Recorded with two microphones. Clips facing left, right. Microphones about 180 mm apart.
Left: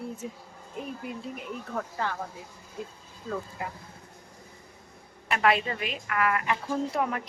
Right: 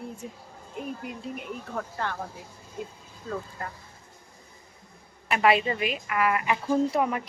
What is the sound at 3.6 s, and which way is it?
Speech, 15° left (ahead or behind).